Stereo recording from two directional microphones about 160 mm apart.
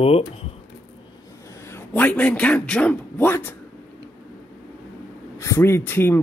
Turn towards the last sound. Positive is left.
turn(degrees=15)  # may be behind; listen again after turning